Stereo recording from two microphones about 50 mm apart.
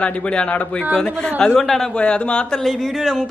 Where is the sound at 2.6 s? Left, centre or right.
Centre.